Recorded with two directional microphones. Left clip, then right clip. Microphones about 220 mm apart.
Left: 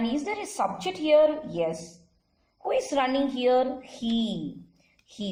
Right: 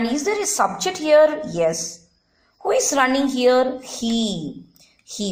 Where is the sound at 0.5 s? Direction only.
35° right (ahead or behind).